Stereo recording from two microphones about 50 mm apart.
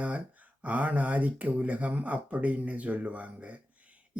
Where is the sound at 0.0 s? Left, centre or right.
Right.